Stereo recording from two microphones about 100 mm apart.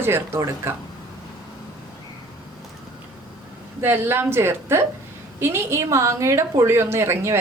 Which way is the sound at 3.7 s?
20° right (ahead or behind).